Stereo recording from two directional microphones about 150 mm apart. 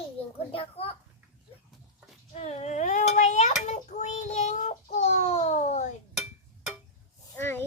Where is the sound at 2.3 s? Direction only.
45° left (ahead or behind).